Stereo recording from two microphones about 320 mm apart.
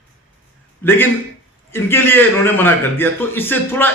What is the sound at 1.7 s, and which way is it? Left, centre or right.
A man's voice, centre.